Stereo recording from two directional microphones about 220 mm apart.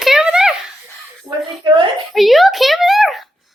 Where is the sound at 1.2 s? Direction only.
20° right (ahead or behind).